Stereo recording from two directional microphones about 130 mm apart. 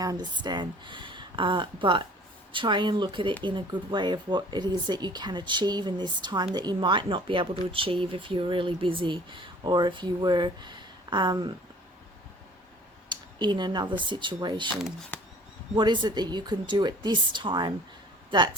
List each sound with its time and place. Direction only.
0.0 s speech: 30° right (ahead or behind)
13.1 s speech: 35° right (ahead or behind)
15.1 s a sound: 10° left (ahead or behind)
15.7 s speech: 35° right (ahead or behind)